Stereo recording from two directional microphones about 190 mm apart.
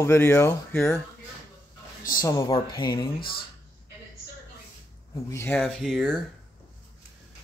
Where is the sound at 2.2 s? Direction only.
20° left (ahead or behind).